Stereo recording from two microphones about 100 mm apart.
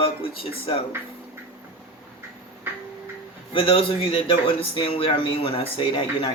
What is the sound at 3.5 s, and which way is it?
Speech, 65° left (ahead or behind).